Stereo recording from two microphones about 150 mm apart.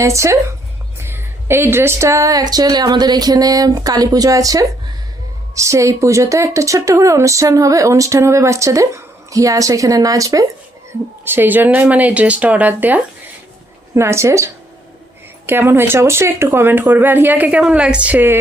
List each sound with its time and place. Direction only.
0.0 s speech: 20° right (ahead or behind)